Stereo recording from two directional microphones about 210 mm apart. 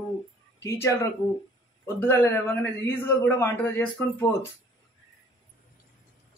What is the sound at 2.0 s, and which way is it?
A man's voice, 10° left (ahead or behind).